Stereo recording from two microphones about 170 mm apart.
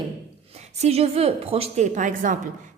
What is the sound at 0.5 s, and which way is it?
A woman's voice, 40° right (ahead or behind).